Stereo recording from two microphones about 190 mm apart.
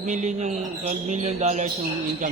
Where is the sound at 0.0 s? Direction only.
40° right (ahead or behind).